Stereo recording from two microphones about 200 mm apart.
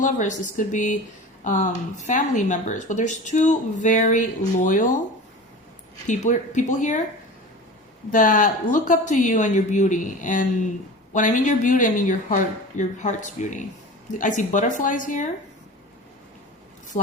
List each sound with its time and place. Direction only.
0.0 s speech: 40° left (ahead or behind)
6.1 s speech: 40° left (ahead or behind)
8.1 s speech: 40° left (ahead or behind)